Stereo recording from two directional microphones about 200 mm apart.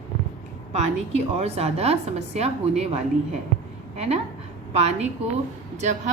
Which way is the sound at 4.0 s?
30° right (ahead or behind).